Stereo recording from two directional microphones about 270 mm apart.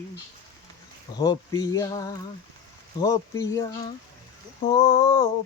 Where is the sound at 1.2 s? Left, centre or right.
Centre.